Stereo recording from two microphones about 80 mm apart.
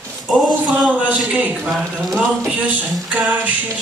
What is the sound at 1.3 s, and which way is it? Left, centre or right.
Music, centre.